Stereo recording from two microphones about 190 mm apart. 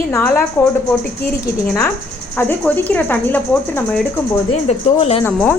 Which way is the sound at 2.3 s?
10° left (ahead or behind).